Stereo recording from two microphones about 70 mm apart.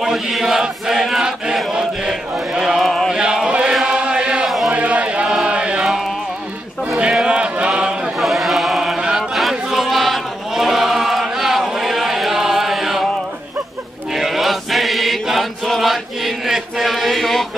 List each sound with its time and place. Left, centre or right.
0.0 s chant: centre
3.2 s chant: centre
4.5 s a sound: centre
4.7 s chant: centre
5.9 s music: centre
7.0 s a sound: centre
14.1 s chant: centre